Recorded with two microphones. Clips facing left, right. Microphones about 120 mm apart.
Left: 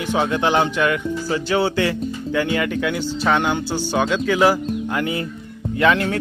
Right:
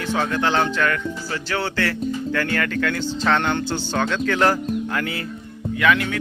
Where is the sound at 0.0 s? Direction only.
15° left (ahead or behind).